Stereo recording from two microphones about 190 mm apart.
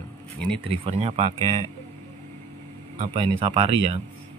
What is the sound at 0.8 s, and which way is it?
Speech, 30° right (ahead or behind).